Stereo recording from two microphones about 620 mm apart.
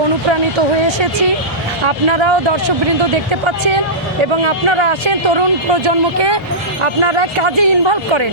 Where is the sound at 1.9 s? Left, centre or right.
Right.